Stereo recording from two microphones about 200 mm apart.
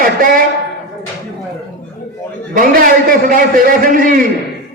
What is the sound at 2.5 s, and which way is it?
A man's voice, 45° right (ahead or behind).